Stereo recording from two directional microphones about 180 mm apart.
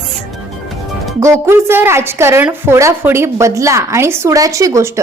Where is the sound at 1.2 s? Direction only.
15° right (ahead or behind).